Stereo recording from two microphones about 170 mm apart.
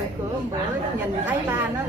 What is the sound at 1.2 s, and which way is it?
Speech, 10° right (ahead or behind).